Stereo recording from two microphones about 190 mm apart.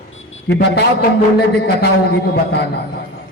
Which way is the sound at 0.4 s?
60° left (ahead or behind).